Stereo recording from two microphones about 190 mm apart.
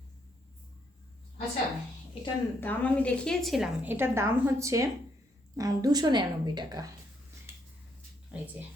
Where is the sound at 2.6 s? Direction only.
10° left (ahead or behind); by 6.8 s 20° right (ahead or behind).